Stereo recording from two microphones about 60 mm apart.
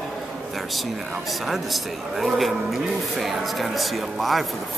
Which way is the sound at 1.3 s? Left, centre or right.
Centre.